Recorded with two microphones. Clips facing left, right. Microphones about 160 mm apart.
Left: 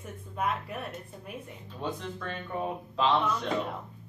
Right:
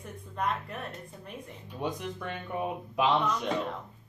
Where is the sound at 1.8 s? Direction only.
15° right (ahead or behind).